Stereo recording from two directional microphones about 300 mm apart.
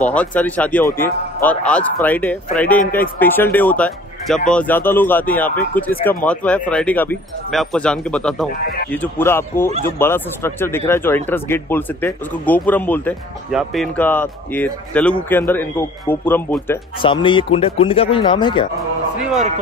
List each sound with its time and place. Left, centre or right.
0.0 s speech: centre